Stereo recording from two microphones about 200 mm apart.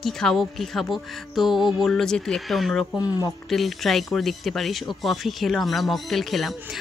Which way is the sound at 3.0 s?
20° left (ahead or behind).